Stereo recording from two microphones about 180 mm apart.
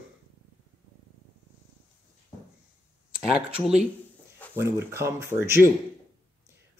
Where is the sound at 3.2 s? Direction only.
5° right (ahead or behind).